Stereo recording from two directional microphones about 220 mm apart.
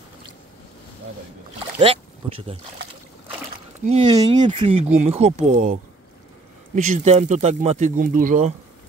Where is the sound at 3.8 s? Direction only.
25° right (ahead or behind).